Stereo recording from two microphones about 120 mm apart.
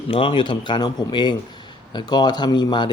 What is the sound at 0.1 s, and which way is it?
A man's voice, 45° left (ahead or behind).